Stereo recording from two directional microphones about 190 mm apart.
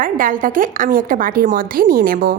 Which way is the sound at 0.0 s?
45° right (ahead or behind).